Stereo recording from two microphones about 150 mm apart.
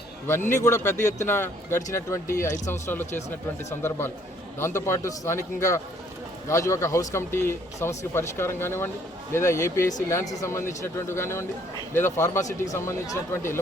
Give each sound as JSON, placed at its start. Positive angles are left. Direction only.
{"t": 0.3, "sound": "a man's voice", "side_deg": 15}